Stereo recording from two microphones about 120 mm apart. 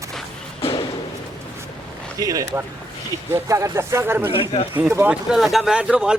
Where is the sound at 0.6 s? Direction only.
50° left (ahead or behind).